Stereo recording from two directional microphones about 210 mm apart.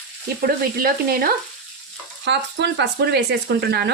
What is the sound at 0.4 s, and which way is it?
Speech, 45° right (ahead or behind).